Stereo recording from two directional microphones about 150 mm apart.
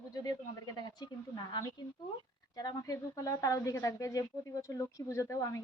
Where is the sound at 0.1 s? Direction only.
25° left (ahead or behind).